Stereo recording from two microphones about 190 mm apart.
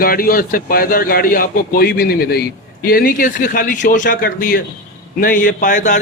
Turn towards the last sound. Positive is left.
turn(degrees=40)  # may be behind; listen again after turning